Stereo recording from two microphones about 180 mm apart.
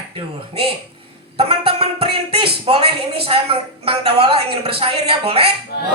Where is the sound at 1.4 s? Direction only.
30° right (ahead or behind).